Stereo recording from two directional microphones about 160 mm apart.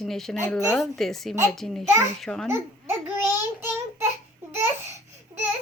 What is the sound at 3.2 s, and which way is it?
Child singing, 15° right (ahead or behind).